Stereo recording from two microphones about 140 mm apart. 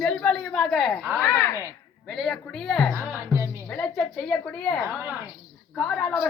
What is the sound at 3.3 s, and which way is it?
Music, 20° right (ahead or behind).